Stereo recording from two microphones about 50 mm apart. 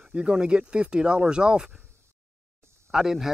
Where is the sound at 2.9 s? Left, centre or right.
Centre.